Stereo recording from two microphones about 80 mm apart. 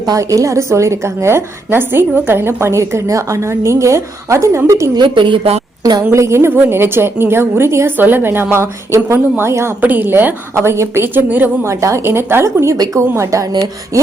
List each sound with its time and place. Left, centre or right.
0.0 s a woman's voice: right
4.9 s a woman's voice: right
6.1 s a woman's voice: right
9.8 s a woman's voice: right
11.6 s a woman's voice: right
12.7 s speech: right
13.1 s a woman's voice: right